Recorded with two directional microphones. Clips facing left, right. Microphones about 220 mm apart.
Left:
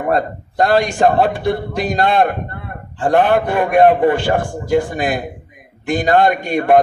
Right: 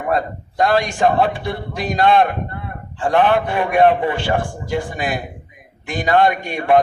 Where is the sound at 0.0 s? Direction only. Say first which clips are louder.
Left 3 dB; 45° left (ahead or behind).